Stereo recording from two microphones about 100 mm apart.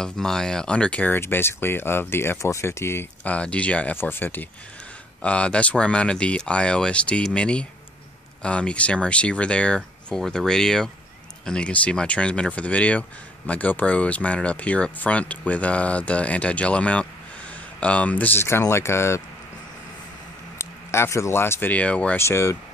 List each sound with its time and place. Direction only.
0.0 s speech: 5° left (ahead or behind); by 3.3 s 25° left (ahead or behind)
3.3 s speech: 10° left (ahead or behind)
20.5 s speech: 25° left (ahead or behind)
22.2 s speech: 30° left (ahead or behind)